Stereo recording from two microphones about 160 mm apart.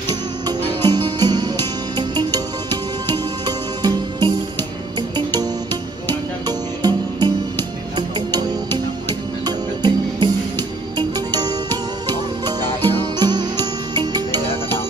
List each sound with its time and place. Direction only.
0.1 s music: 25° right (ahead or behind)